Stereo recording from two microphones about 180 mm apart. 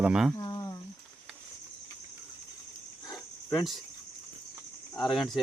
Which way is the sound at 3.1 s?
25° left (ahead or behind).